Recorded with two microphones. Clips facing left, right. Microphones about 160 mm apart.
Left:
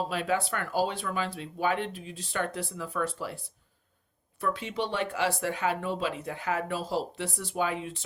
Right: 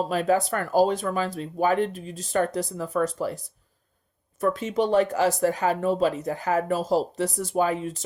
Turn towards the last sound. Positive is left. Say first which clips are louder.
# right 6 dB
turn(degrees=-40)  # may be behind; listen again after turning